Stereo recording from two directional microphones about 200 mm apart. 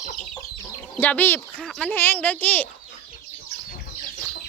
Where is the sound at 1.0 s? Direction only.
10° left (ahead or behind).